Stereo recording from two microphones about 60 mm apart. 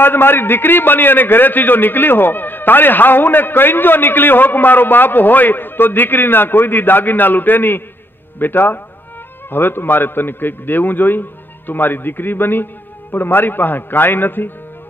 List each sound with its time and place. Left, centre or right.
0.0 s a man's voice: left